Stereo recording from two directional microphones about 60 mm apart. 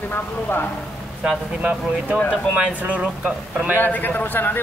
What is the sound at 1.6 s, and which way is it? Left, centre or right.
Speech, right.